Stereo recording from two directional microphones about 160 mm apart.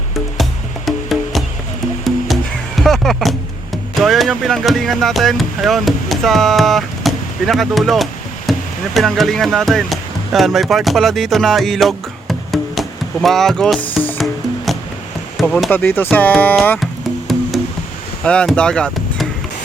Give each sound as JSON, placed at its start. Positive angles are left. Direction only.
{"t": 0.9, "sound": "music", "side_deg": 0}
{"t": 4.0, "sound": "speech", "side_deg": 0}
{"t": 8.5, "sound": "a sound", "side_deg": 0}
{"t": 9.0, "sound": "speech", "side_deg": 0}
{"t": 13.8, "sound": "music", "side_deg": 10}
{"t": 14.2, "sound": "music", "side_deg": 0}
{"t": 15.4, "sound": "speech", "side_deg": 0}
{"t": 15.7, "sound": "speech", "side_deg": 10}
{"t": 16.8, "sound": "music", "side_deg": 0}
{"t": 18.2, "sound": "speech", "side_deg": 5}